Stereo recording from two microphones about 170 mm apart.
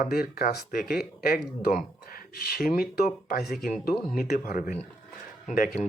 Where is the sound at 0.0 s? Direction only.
60° left (ahead or behind).